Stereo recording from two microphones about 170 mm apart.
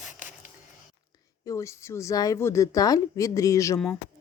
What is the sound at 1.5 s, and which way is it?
A woman's voice, 15° left (ahead or behind).